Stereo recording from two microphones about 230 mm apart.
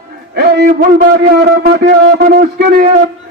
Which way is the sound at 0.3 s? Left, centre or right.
Right.